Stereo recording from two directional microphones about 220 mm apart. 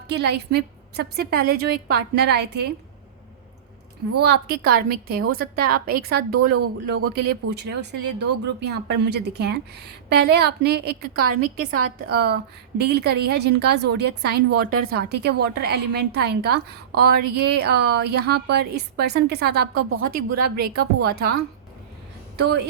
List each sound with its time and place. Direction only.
0.1 s a woman's voice: 50° right (ahead or behind)
4.2 s a woman's voice: 50° right (ahead or behind)
22.4 s speech: 50° right (ahead or behind)